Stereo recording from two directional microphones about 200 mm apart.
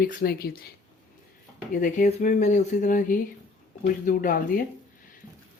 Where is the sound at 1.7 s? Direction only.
40° left (ahead or behind).